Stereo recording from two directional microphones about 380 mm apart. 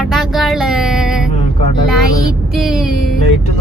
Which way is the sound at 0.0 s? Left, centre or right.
Centre.